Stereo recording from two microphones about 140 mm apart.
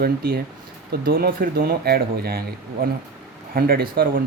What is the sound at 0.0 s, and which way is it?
Speech, 90° right.